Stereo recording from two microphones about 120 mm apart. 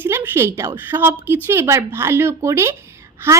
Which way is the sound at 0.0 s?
20° right (ahead or behind).